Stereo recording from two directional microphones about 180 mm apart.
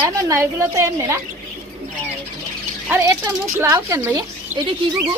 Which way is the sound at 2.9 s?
15° right (ahead or behind).